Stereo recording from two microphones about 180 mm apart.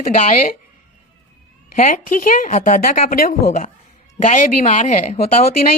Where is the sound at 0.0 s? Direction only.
45° left (ahead or behind).